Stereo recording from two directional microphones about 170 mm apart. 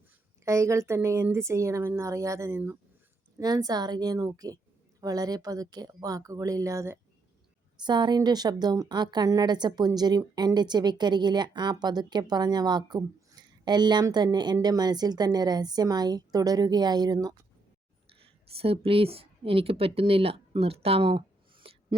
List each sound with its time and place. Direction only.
0.4 s a woman's voice: 15° right (ahead or behind)
18.1 s speech: 35° right (ahead or behind)